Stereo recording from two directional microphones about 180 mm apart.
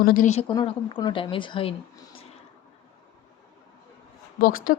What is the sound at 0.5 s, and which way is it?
Speech, 25° left (ahead or behind).